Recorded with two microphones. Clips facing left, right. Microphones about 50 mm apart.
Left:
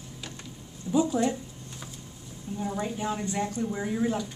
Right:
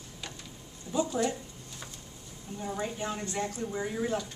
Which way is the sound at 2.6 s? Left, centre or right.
Centre.